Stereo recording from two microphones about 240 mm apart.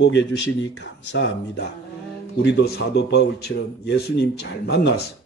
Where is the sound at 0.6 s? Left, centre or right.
Left.